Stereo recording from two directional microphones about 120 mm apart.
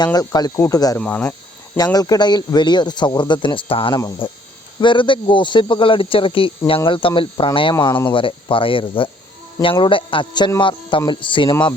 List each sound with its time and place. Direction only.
0.0 s a man's voice: 35° left (ahead or behind)
0.9 s speech: 15° left (ahead or behind)
1.7 s a man's voice: 30° left (ahead or behind)